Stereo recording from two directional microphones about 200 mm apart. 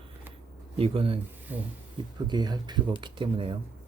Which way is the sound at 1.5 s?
10° right (ahead or behind).